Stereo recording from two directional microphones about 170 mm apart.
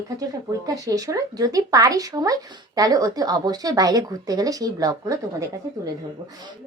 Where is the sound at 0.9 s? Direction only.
20° right (ahead or behind).